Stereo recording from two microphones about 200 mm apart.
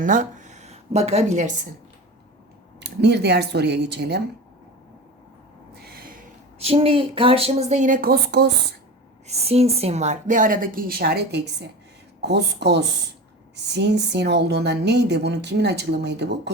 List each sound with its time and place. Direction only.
0.0 s speech: 40° right (ahead or behind)
2.8 s speech: 55° right (ahead or behind)
5.8 s snort: 50° right (ahead or behind)
6.6 s a woman's voice: 30° right (ahead or behind); by 8.5 s 55° right (ahead or behind)
9.2 s a woman's voice: 30° right (ahead or behind); by 16.5 s 60° right (ahead or behind)